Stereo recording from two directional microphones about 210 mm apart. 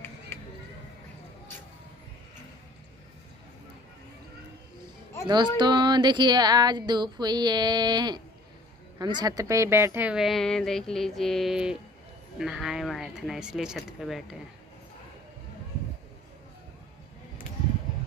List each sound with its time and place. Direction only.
5.6 s music: 20° right (ahead or behind)
8.9 s a woman's voice: 20° right (ahead or behind); by 14.3 s centre (ahead or behind)